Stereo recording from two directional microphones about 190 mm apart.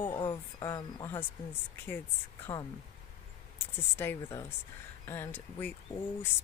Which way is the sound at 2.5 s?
20° left (ahead or behind).